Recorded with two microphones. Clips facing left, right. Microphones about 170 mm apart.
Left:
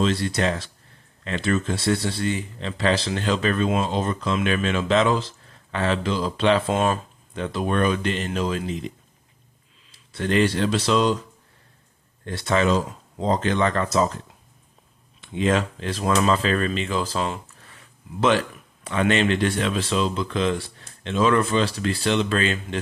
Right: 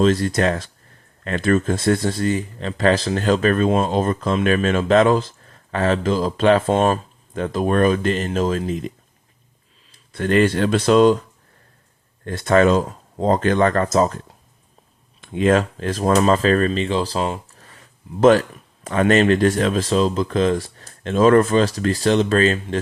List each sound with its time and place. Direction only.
0.0 s speech: 45° right (ahead or behind)
10.1 s speech: 50° right (ahead or behind)
12.2 s speech: 50° right (ahead or behind)
15.2 s speech: 50° right (ahead or behind)